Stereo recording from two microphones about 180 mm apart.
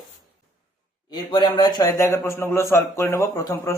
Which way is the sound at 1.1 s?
25° left (ahead or behind).